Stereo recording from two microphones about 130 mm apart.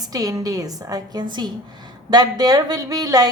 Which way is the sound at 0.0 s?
30° right (ahead or behind).